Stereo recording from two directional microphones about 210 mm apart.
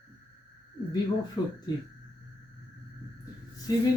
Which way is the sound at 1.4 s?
15° left (ahead or behind).